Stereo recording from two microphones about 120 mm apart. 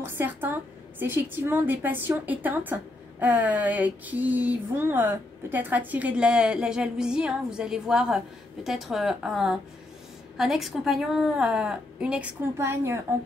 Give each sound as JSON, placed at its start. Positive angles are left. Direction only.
{"t": 0.0, "sound": "a woman's voice", "side_deg": -15}
{"t": 12.5, "sound": "a woman's voice", "side_deg": -20}